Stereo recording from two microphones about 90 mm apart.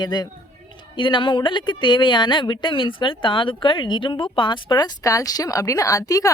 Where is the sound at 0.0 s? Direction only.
55° left (ahead or behind).